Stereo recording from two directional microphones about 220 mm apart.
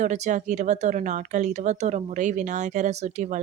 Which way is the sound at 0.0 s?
35° right (ahead or behind).